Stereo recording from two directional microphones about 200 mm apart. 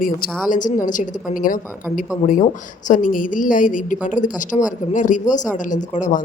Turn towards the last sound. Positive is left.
turn(degrees=40)  # may be behind; listen again after turning